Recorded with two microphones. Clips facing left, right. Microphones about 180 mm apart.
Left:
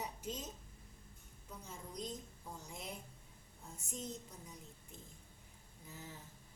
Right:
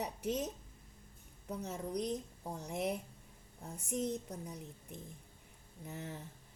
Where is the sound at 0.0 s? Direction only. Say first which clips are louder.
Right 8 dB; 70° right (ahead or behind).